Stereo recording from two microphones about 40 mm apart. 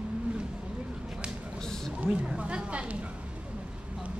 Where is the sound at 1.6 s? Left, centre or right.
Centre.